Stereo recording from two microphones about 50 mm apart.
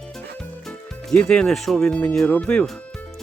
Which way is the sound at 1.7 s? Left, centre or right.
Centre.